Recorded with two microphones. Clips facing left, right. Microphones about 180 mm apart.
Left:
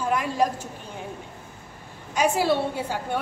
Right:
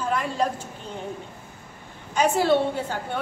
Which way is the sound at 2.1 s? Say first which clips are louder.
Right 2 dB; 10° left (ahead or behind).